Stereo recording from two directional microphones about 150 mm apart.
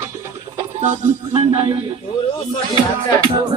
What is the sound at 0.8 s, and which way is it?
Music, 40° right (ahead or behind).